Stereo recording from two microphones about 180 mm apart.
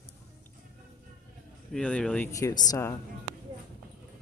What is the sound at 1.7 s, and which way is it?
Speech, 5° left (ahead or behind).